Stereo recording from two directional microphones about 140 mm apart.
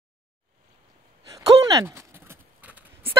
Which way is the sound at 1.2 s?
25° right (ahead or behind).